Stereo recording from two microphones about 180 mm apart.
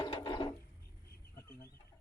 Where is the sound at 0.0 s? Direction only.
25° left (ahead or behind).